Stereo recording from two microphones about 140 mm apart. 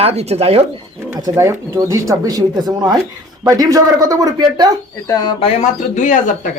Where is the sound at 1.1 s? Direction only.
20° right (ahead or behind).